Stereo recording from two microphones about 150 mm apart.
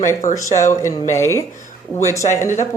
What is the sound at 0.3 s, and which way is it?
Speech, 20° left (ahead or behind).